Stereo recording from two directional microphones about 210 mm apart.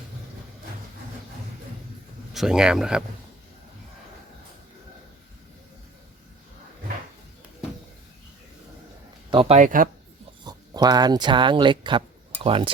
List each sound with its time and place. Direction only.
2.3 s speech: centre (ahead or behind)
9.3 s speech: 25° right (ahead or behind)
10.4 s speech: 20° right (ahead or behind)